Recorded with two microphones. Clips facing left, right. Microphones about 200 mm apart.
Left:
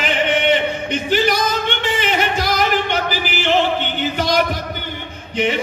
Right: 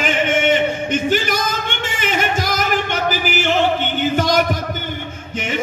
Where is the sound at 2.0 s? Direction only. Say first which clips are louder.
Right 3 dB; 45° right (ahead or behind).